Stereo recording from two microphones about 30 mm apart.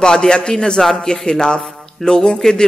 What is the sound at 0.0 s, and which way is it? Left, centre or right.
Speech, centre.